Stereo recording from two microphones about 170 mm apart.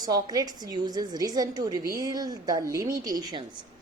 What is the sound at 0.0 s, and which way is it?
A woman's voice, 25° right (ahead or behind).